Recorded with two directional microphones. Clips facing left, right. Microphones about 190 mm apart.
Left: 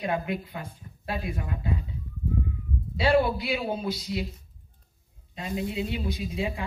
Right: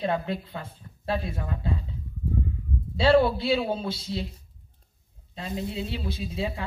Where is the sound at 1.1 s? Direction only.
15° left (ahead or behind).